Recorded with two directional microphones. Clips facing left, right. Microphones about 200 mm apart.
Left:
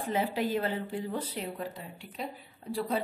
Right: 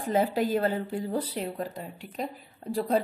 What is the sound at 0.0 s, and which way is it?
A woman's voice, 40° right (ahead or behind).